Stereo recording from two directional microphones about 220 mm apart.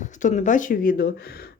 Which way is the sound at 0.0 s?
35° left (ahead or behind).